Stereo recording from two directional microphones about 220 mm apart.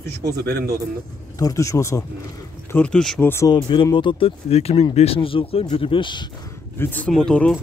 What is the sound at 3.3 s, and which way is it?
Speech, 15° left (ahead or behind).